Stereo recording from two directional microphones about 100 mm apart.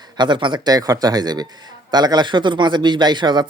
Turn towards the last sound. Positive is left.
turn(degrees=-50)  # may be behind; listen again after turning